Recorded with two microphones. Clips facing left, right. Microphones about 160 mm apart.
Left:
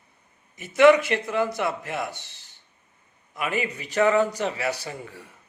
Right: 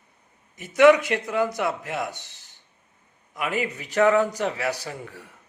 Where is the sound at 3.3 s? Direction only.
15° right (ahead or behind).